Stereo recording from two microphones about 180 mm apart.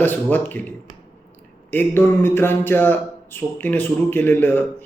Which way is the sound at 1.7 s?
10° left (ahead or behind).